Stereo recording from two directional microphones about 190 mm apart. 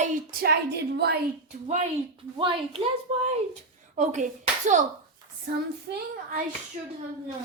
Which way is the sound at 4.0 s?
40° right (ahead or behind).